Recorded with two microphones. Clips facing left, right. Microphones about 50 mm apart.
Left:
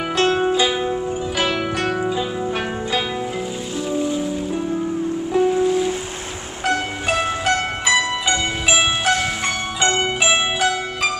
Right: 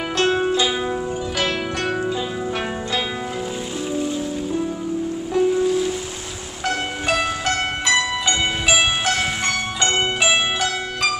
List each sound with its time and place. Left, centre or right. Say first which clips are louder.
0.2 s music: left 1 dB; centre
1.4 s zither: left 2 dB; centre
3.9 s music: left 3 dB; centre
7.1 s music: left 2 dB; centre
9.9 s zither: even; centre